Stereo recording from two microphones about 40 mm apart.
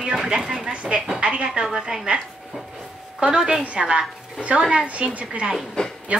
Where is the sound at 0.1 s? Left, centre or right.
Centre.